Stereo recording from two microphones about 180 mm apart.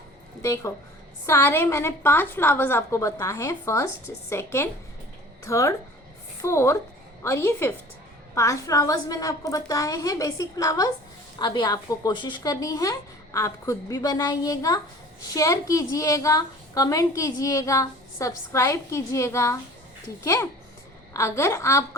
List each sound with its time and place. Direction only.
0.4 s a woman's voice: 15° left (ahead or behind)